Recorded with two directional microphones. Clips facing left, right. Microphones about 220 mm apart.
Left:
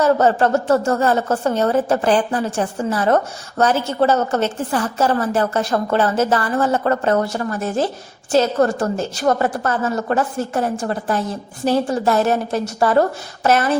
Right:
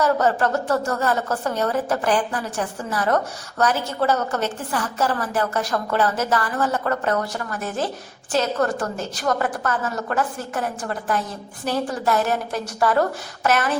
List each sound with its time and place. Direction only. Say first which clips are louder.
0.0 s a woman's voice: left 4 dB; 25° left (ahead or behind)